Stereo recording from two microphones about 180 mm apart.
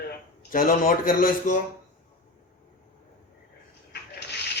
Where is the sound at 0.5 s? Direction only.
50° left (ahead or behind).